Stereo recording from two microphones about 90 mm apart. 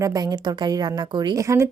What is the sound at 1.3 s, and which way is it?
Speech, 35° right (ahead or behind).